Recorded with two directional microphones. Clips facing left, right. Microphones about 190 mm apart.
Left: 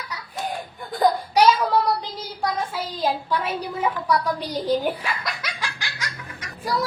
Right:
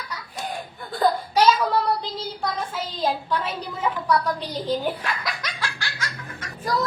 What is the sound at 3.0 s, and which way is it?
A woman's voice, 10° left (ahead or behind).